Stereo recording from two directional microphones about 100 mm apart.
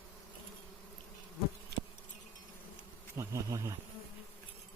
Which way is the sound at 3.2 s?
30° right (ahead or behind).